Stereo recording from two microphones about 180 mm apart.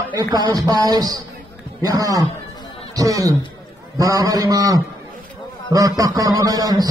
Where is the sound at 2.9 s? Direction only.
20° right (ahead or behind).